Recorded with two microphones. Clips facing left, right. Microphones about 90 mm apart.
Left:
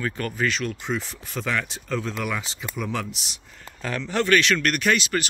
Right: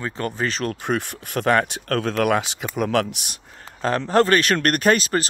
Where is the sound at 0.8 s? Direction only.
60° right (ahead or behind).